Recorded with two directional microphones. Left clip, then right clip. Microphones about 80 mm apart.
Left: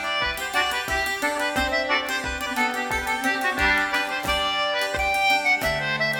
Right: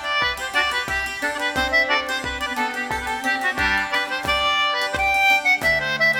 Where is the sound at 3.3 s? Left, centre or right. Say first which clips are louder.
Right 2 dB; right.